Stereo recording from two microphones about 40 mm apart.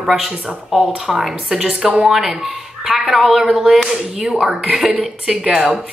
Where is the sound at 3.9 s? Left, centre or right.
Centre.